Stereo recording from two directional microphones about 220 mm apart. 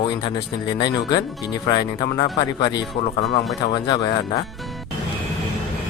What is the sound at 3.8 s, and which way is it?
Speech, 20° left (ahead or behind).